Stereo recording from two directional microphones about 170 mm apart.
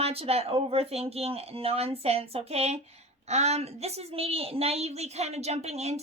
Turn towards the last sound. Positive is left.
turn(degrees=-40)  # may be behind; listen again after turning